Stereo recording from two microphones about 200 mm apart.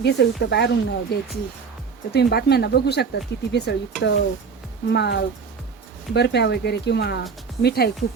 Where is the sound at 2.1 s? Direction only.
55° left (ahead or behind).